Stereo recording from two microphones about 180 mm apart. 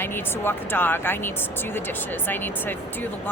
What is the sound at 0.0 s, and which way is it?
Speech, 10° left (ahead or behind).